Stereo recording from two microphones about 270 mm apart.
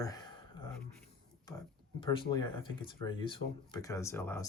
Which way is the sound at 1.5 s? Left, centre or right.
Centre.